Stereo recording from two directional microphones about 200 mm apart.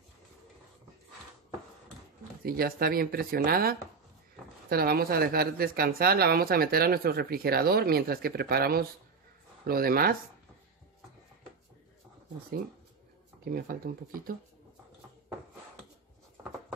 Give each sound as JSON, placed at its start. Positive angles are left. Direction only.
{"t": 2.4, "sound": "speech", "side_deg": -50}
{"t": 13.5, "sound": "speech", "side_deg": -50}